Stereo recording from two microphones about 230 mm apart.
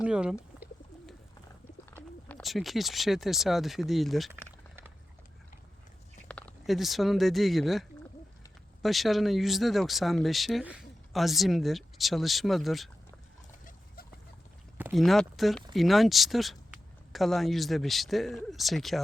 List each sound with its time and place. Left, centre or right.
0.0 s speech: centre
2.0 s speech: centre
4.4 s a sound: centre
6.2 s speech: centre
13.7 s rodents: left
14.8 s speech: centre